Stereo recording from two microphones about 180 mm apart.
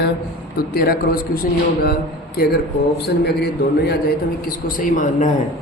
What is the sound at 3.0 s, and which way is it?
Speech, 65° left (ahead or behind).